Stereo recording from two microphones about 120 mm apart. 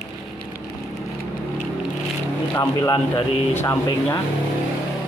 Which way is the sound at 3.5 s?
20° left (ahead or behind).